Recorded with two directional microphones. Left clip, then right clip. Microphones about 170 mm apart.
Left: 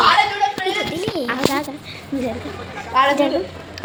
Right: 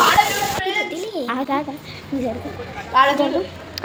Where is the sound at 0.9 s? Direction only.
5° left (ahead or behind).